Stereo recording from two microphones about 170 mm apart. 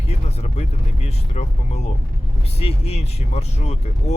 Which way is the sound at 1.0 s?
40° left (ahead or behind).